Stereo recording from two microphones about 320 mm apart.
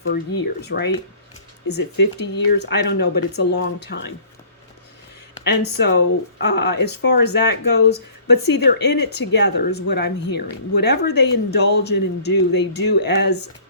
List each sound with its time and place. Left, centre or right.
0.1 s speech: left
5.4 s speech: left